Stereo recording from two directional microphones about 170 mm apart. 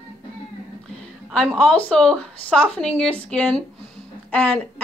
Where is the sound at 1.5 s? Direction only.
5° left (ahead or behind).